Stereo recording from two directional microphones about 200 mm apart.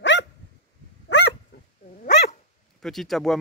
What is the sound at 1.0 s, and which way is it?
Dog, 60° left (ahead or behind).